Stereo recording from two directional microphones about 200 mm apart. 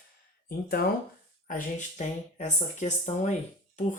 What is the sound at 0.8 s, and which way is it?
Speech, 50° left (ahead or behind).